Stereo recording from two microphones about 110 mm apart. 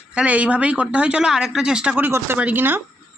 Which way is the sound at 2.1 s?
20° right (ahead or behind).